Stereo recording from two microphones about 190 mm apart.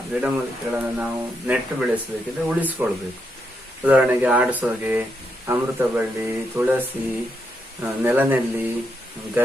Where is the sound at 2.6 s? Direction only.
10° right (ahead or behind).